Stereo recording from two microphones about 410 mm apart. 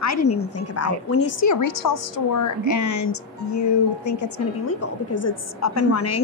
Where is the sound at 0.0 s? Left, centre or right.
Left.